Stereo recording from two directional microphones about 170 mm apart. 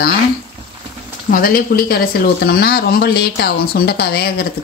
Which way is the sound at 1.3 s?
60° left (ahead or behind).